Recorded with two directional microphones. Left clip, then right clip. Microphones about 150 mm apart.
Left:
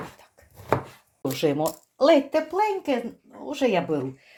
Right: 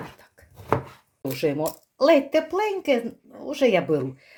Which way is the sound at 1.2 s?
15° left (ahead or behind).